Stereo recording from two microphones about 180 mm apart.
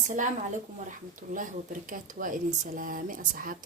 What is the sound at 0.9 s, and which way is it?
Speech, 45° right (ahead or behind).